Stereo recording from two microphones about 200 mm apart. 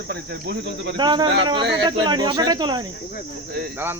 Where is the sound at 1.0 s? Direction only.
20° right (ahead or behind).